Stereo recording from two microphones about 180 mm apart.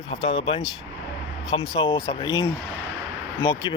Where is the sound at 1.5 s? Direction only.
30° left (ahead or behind).